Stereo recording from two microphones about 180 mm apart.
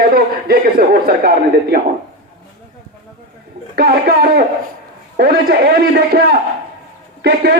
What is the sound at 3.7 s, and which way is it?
A man's voice, 60° right (ahead or behind).